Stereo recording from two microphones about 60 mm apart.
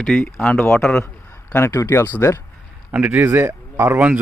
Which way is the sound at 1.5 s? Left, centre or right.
Left.